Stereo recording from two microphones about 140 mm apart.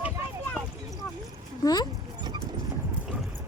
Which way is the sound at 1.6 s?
25° left (ahead or behind).